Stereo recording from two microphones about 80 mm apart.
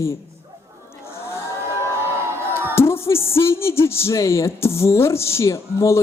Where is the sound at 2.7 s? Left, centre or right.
Left.